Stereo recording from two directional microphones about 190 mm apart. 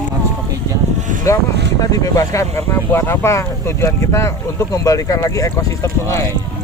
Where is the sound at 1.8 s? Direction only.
20° left (ahead or behind).